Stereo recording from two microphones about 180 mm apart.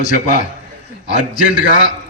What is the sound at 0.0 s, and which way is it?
A man's voice, 45° left (ahead or behind).